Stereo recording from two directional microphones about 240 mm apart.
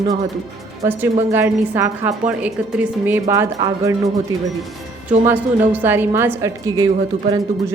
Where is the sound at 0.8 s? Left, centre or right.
Centre.